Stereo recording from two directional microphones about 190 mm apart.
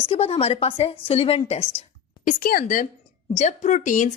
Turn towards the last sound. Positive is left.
turn(degrees=40)  # may be behind; listen again after turning